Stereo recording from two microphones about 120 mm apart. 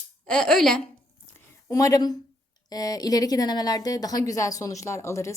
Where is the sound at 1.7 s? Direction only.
30° left (ahead or behind).